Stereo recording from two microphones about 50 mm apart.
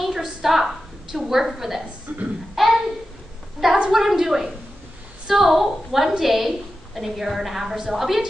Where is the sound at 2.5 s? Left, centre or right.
Centre.